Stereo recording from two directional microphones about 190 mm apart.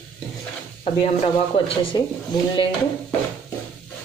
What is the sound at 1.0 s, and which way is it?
Speech, 30° left (ahead or behind).